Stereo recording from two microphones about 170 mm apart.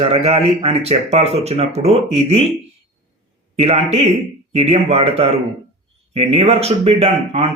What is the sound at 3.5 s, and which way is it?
A man's voice, 40° right (ahead or behind).